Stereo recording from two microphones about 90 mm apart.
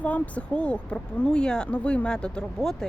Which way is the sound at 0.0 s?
15° left (ahead or behind).